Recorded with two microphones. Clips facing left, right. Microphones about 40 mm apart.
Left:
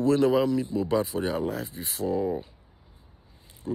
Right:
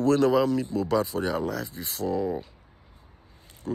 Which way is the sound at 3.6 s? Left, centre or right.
Right.